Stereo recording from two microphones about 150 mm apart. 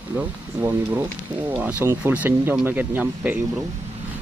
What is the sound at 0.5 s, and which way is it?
Speech, 20° right (ahead or behind).